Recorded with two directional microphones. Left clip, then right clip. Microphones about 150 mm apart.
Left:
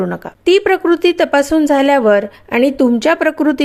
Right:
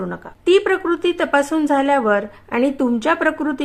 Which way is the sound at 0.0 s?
45° left (ahead or behind).